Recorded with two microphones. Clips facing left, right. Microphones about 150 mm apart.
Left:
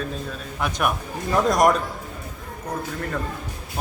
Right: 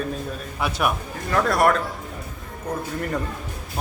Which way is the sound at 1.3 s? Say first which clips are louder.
Left 1 dB; 15° left (ahead or behind).